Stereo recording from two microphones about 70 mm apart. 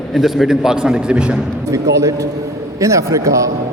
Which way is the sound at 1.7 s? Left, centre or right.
Right.